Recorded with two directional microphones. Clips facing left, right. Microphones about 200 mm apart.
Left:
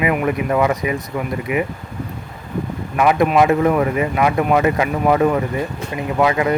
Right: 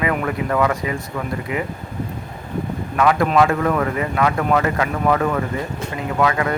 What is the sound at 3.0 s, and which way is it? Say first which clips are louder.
Speech: left 2 dB; 20° left (ahead or behind).